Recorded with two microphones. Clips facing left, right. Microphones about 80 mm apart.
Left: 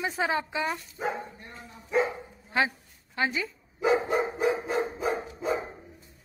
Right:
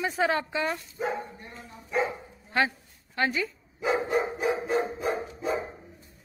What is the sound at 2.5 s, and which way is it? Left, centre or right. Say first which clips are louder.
Bow-wow: right 1 dB; centre.